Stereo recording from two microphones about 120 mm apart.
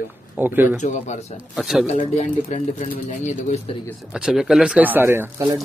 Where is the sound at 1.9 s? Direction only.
70° left (ahead or behind); by 3.5 s 85° left.